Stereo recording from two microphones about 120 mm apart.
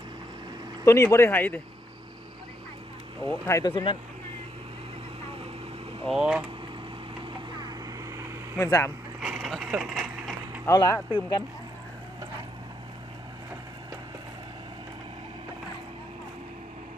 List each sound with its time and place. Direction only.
0.9 s speech: 25° left (ahead or behind)
3.2 s speech: 20° left (ahead or behind)
3.6 s speech: 35° left (ahead or behind)
6.1 s speech: 5° right (ahead or behind)
7.6 s vehicle: 30° right (ahead or behind)
8.5 s speech: 25° left (ahead or behind)
9.2 s a sound: centre (ahead or behind)
10.7 s speech: 30° left (ahead or behind)